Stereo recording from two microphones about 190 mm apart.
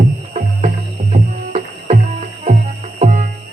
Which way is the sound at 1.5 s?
40° right (ahead or behind).